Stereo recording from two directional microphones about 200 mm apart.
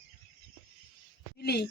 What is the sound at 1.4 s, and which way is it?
Speech, 55° left (ahead or behind).